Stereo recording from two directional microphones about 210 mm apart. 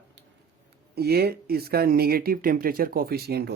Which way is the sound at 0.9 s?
50° right (ahead or behind).